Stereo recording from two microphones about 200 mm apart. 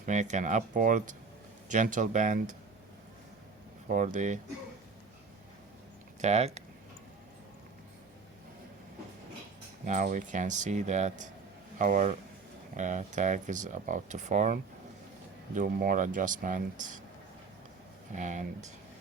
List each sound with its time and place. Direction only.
0.0 s speech: 40° right (ahead or behind)
3.8 s speech: 40° right (ahead or behind)
6.2 s speech: 35° right (ahead or behind)
9.8 s speech: 40° right (ahead or behind)
18.1 s speech: 40° right (ahead or behind)